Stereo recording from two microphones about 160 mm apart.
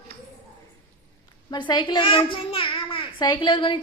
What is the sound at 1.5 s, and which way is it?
A child's voice, 25° left (ahead or behind).